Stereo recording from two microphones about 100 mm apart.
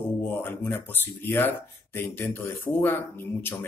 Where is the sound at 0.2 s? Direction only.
20° left (ahead or behind).